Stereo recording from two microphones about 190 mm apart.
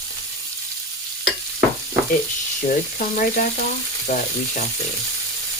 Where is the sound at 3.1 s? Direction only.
45° left (ahead or behind).